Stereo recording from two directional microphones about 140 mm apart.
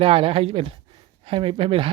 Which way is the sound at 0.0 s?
40° right (ahead or behind).